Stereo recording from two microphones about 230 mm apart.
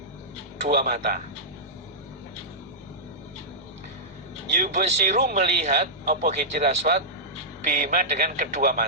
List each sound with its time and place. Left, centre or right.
0.8 s speech: right
4.5 s speech: right